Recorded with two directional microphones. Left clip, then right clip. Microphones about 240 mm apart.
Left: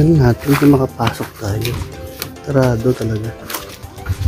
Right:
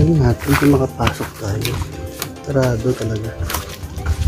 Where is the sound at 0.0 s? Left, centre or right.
Left.